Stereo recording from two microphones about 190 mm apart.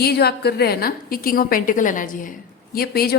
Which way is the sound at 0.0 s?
55° left (ahead or behind).